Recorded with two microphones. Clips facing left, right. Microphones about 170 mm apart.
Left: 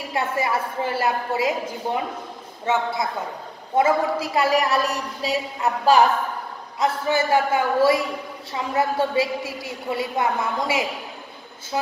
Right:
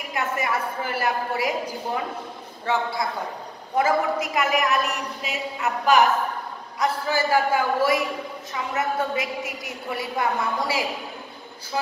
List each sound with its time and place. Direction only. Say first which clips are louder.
0.1 s a woman's voice: left 2 dB; 30° left (ahead or behind)
2.6 s a woman's voice: left 2 dB; 20° left (ahead or behind)